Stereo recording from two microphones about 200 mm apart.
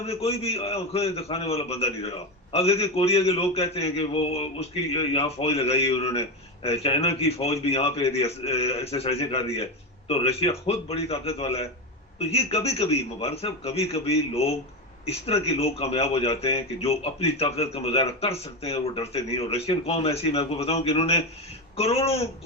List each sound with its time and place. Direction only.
0.0 s a man's voice: 30° left (ahead or behind)